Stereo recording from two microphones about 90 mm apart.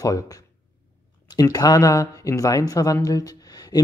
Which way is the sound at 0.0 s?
40° left (ahead or behind).